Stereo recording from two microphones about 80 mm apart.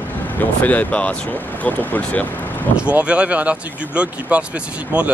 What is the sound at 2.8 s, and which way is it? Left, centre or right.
Speech, centre.